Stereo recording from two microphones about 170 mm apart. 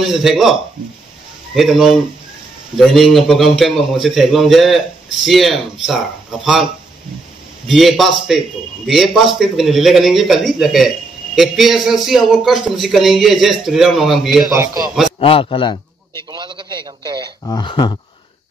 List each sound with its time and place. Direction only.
0.1 s a man's voice: centre (ahead or behind)
14.5 s speech: 15° right (ahead or behind)
15.1 s a man's voice: 30° left (ahead or behind)
16.3 s a man's voice: 30° right (ahead or behind)
17.5 s speech: 25° left (ahead or behind)